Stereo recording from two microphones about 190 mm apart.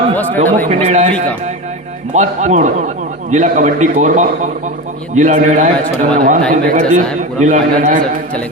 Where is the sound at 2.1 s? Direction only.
40° right (ahead or behind).